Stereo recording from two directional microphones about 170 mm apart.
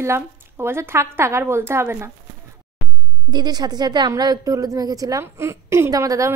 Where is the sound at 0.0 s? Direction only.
15° right (ahead or behind).